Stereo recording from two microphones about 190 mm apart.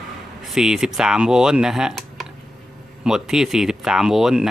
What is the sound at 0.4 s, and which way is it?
Speech, centre (ahead or behind).